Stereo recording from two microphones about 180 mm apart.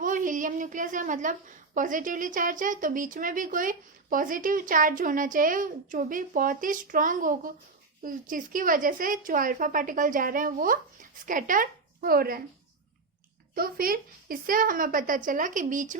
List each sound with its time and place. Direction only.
0.0 s a woman's voice: 45° right (ahead or behind)
13.5 s a woman's voice: 55° right (ahead or behind)